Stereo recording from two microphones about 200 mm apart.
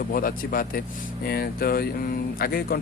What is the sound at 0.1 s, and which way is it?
Speech, 45° left (ahead or behind).